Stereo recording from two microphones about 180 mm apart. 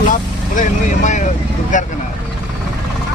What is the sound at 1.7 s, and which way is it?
Speech, 45° left (ahead or behind).